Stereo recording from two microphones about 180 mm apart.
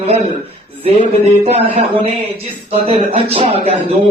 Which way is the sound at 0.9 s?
35° right (ahead or behind).